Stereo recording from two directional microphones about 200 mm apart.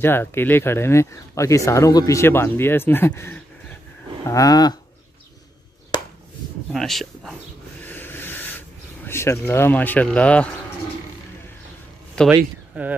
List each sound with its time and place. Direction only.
0.0 s speech: 10° left (ahead or behind)
6.7 s speech: centre (ahead or behind)
7.8 s a sound: 10° left (ahead or behind)
12.3 s speech: 10° right (ahead or behind)